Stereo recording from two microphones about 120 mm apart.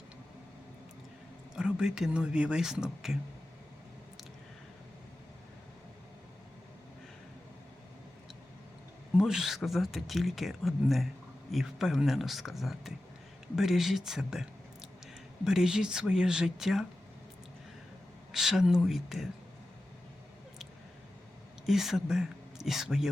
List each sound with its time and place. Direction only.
1.5 s speech: 5° right (ahead or behind)
9.1 s speech: 5° right (ahead or behind)
18.3 s speech: 5° right (ahead or behind)
21.7 s speech: centre (ahead or behind)